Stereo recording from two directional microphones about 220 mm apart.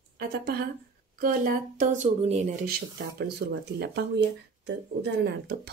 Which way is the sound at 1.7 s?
35° right (ahead or behind).